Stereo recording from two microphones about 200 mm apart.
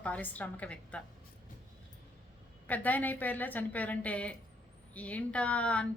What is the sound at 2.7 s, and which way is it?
A woman's voice, 10° left (ahead or behind).